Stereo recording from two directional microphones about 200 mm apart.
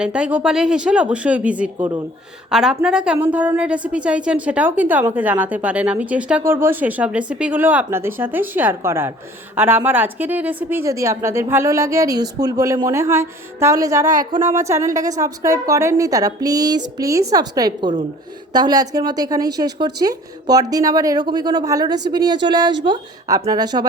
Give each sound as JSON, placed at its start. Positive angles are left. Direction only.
{"t": 0.0, "sound": "a woman's voice", "side_deg": -5}